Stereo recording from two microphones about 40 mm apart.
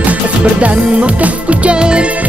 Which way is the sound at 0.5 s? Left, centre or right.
Right.